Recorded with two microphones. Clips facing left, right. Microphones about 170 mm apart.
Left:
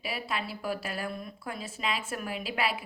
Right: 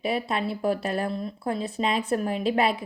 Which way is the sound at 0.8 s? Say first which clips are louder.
Right 8 dB; 35° right (ahead or behind).